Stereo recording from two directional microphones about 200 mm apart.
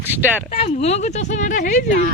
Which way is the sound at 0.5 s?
30° left (ahead or behind).